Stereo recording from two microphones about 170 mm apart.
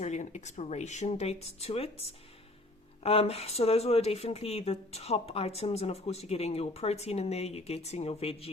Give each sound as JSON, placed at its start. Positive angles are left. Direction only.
{"t": 0.0, "sound": "speech", "side_deg": 40}
{"t": 3.0, "sound": "speech", "side_deg": 35}